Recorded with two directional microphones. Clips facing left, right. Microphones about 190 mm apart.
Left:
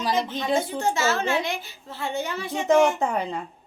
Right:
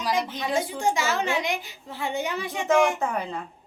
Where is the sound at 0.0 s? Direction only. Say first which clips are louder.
Left 1 dB; 25° left (ahead or behind).